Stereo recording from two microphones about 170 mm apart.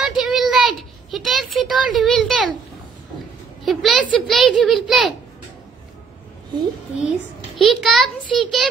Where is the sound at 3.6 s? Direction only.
Centre (ahead or behind).